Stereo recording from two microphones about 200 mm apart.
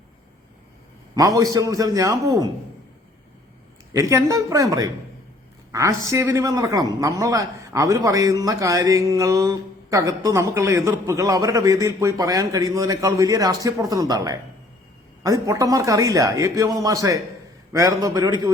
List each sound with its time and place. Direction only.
1.1 s a man's voice: 20° right (ahead or behind)
4.1 s a man's voice: 15° right (ahead or behind)
6.1 s a man's voice: 15° right (ahead or behind)